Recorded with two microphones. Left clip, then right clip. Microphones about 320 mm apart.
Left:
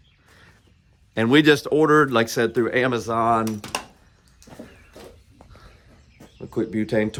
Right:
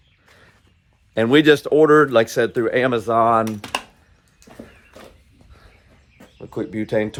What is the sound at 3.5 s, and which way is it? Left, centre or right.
Speech, right.